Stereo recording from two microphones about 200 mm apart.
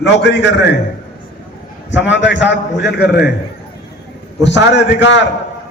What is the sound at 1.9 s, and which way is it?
A man's voice, 60° left (ahead or behind).